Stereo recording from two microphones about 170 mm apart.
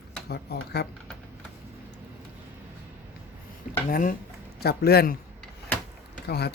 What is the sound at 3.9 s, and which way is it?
Speech, 55° left (ahead or behind).